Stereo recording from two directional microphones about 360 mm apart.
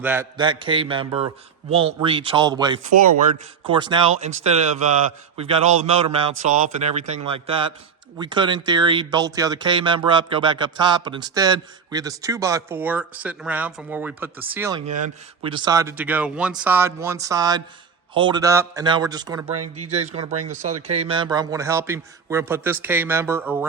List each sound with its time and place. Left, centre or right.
0.0 s speech: centre
19.5 s speech: right
20.5 s speech: centre